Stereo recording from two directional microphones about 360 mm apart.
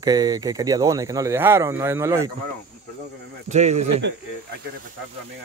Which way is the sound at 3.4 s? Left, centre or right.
Centre.